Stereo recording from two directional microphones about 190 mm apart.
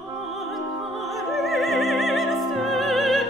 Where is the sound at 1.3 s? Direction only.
Centre (ahead or behind).